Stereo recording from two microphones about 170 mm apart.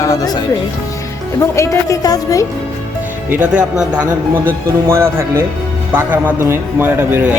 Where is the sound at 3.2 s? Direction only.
10° right (ahead or behind).